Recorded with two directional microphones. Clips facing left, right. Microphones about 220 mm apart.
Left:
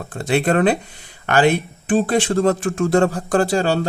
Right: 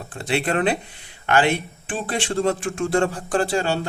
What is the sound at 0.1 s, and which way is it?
Speech, 45° left (ahead or behind).